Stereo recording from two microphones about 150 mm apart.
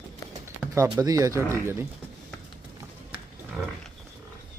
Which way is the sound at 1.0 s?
25° right (ahead or behind).